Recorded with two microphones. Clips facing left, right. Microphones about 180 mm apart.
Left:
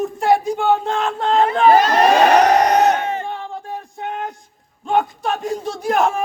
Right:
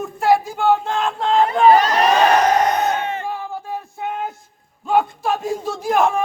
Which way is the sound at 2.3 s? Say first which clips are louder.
Left 3 dB; 70° left (ahead or behind).